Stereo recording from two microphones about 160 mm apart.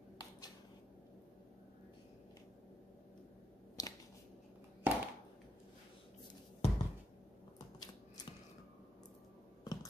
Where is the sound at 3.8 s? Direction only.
25° left (ahead or behind).